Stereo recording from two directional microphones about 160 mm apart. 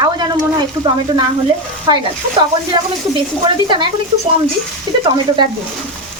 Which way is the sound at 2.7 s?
25° right (ahead or behind).